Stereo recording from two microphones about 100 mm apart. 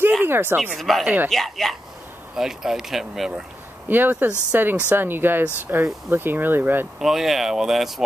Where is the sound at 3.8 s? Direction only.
20° right (ahead or behind).